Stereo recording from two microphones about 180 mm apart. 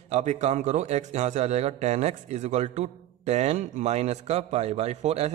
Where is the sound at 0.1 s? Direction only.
40° right (ahead or behind).